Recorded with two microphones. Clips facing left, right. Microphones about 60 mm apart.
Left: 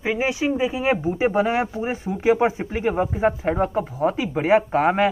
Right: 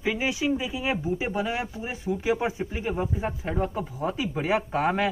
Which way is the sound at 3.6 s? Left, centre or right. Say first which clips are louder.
Left 6 dB; left.